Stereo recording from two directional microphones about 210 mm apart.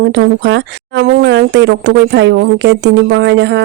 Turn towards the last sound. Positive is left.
turn(degrees=-55)  # may be behind; listen again after turning